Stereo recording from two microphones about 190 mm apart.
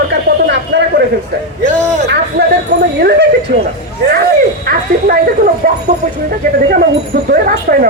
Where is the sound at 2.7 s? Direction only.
60° right (ahead or behind).